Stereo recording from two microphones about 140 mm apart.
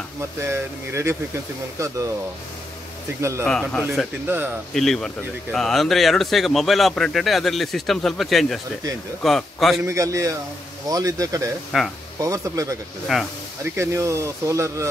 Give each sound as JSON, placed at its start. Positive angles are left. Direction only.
{"t": 0.4, "sound": "speech", "side_deg": -20}
{"t": 3.2, "sound": "speech", "side_deg": -20}
{"t": 3.4, "sound": "speech", "side_deg": 5}
{"t": 9.8, "sound": "speech", "side_deg": -20}
{"t": 11.7, "sound": "speech", "side_deg": -5}
{"t": 12.2, "sound": "speech", "side_deg": -25}
{"t": 13.1, "sound": "speech", "side_deg": -5}
{"t": 13.7, "sound": "speech", "side_deg": -20}